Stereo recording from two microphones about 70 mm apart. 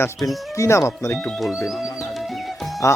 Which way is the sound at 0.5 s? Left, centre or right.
Left.